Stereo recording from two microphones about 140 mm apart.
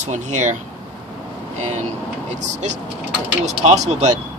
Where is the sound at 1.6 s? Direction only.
55° right (ahead or behind).